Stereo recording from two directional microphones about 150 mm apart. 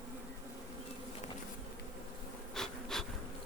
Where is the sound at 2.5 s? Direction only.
5° left (ahead or behind).